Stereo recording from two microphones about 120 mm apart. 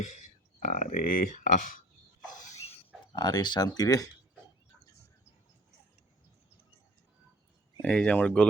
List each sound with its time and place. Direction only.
0.6 s speech: 90° left
2.4 s a sound: 70° left (ahead or behind)
3.2 s speech: 35° left (ahead or behind)
7.8 s speech: 5° left (ahead or behind)